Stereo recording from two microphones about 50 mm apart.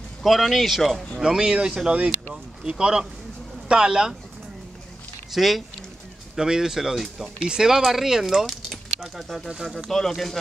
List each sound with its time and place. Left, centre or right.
0.2 s speech: centre
1.2 s speech: centre
1.9 s speech: right
2.6 s speech: centre
5.3 s speech: centre